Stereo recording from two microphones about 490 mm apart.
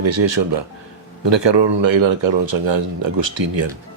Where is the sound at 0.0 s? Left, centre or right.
Right.